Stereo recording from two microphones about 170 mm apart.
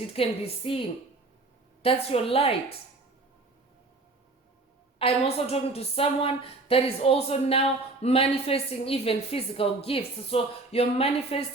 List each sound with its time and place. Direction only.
0.1 s a woman's voice: 35° left (ahead or behind)
4.9 s a woman's voice: 35° left (ahead or behind)